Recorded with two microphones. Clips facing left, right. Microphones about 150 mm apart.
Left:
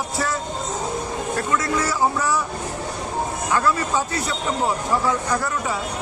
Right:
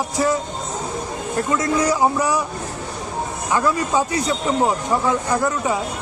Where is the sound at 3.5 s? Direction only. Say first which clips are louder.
Right 3 dB; 15° right (ahead or behind).